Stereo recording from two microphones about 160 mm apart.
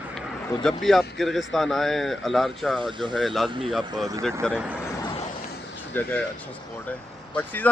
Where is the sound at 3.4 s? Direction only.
30° right (ahead or behind).